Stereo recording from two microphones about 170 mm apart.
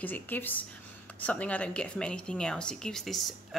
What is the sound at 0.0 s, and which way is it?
A woman's voice, 10° left (ahead or behind).